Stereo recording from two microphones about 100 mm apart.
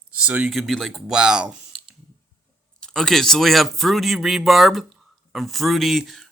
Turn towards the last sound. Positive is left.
turn(degrees=0)  # may be behind; listen again after turning